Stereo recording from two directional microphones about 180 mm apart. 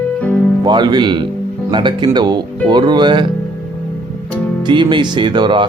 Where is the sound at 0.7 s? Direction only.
25° right (ahead or behind).